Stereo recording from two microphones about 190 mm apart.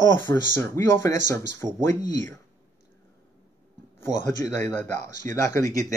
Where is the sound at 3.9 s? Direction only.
15° left (ahead or behind).